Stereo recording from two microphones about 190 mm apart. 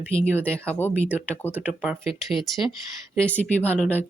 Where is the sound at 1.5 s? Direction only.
5° right (ahead or behind).